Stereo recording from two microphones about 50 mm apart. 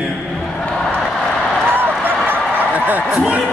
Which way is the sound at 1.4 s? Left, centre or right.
Centre.